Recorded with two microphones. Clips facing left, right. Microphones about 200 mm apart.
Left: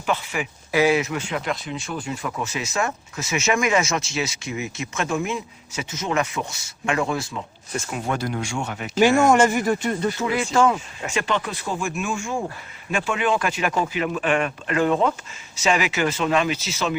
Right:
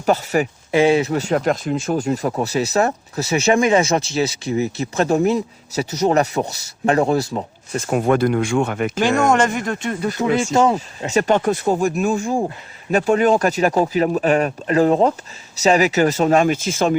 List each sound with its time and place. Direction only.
0.0 s speech: 40° right (ahead or behind)
0.7 s speech: 25° right (ahead or behind)
7.9 s speech: 55° right (ahead or behind)
9.0 s speech: 10° left (ahead or behind)
10.5 s speech: 25° right (ahead or behind)
11.1 s speech: 40° right (ahead or behind)